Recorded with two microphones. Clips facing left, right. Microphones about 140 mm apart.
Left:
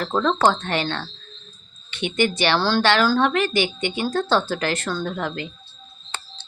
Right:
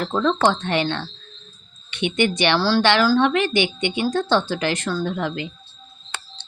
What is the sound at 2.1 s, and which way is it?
Speech, 20° right (ahead or behind).